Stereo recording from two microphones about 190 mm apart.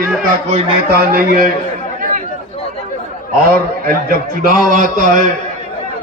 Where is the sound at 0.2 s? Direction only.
50° right (ahead or behind).